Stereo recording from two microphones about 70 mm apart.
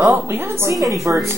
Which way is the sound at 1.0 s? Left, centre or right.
Right.